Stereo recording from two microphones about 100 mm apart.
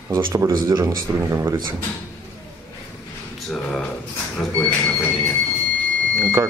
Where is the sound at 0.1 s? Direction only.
30° right (ahead or behind).